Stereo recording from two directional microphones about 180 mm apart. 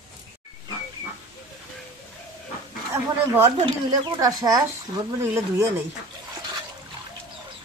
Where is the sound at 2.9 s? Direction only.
15° right (ahead or behind).